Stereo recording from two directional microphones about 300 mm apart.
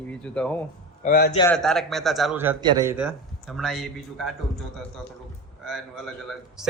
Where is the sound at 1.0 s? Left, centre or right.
Left.